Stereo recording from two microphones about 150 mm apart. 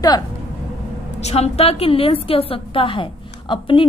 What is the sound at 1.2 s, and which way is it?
Speech, 45° left (ahead or behind).